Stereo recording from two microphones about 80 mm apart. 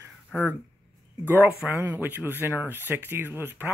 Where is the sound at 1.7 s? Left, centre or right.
Right.